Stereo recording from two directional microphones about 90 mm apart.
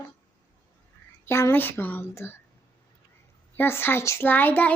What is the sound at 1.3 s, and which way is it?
A woman's voice, 30° left (ahead or behind).